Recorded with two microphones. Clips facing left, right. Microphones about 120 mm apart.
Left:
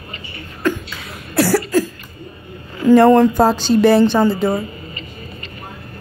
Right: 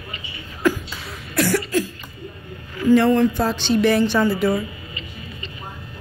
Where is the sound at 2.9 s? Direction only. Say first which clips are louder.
Left 7 dB; 45° left (ahead or behind); by 4.5 s 25° left (ahead or behind).